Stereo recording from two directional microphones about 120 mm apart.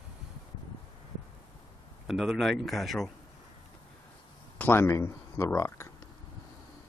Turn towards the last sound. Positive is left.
turn(degrees=25)  # may be behind; listen again after turning